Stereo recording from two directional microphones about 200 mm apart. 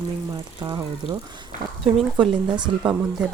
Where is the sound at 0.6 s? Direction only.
20° right (ahead or behind).